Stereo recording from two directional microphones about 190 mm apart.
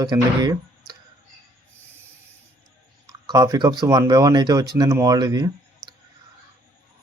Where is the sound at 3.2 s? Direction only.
20° right (ahead or behind).